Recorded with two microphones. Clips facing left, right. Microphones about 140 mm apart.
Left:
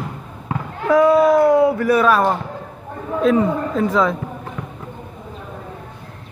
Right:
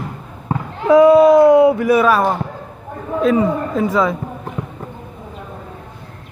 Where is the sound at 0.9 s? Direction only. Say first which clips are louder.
Right 5 dB; 20° right (ahead or behind).